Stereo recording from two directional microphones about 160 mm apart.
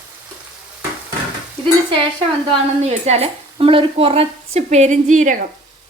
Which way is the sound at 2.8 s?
45° right (ahead or behind).